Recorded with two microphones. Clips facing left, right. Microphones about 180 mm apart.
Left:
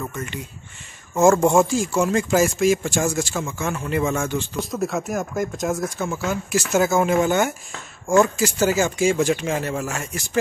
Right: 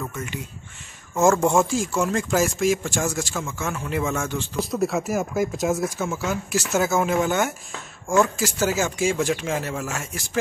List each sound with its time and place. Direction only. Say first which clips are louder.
0.1 s speech: left 1 dB; 5° right (ahead or behind)
1.4 s speech: left 3 dB; centre (ahead or behind)